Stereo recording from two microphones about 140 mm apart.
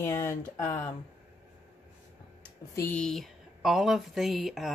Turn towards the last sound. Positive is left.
turn(degrees=0)  # may be behind; listen again after turning